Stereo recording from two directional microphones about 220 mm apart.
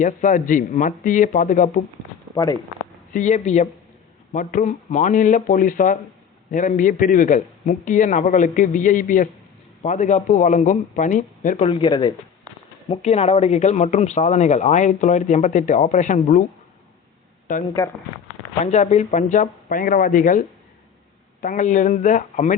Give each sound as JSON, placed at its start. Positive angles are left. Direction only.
{"t": 0.0, "sound": "speech", "side_deg": 35}
{"t": 2.3, "sound": "speech", "side_deg": 15}
{"t": 3.1, "sound": "speech", "side_deg": 35}
{"t": 18.6, "sound": "speech", "side_deg": 35}
{"t": 21.4, "sound": "speech", "side_deg": 35}